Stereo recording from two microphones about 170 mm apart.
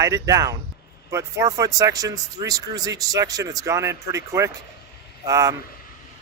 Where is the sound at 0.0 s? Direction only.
20° right (ahead or behind).